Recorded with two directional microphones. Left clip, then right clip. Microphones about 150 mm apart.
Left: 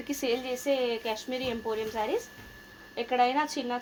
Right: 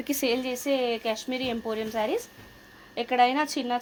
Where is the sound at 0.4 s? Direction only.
90° right.